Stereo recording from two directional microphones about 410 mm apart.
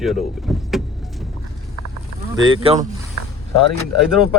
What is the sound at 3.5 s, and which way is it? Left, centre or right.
Speech, left.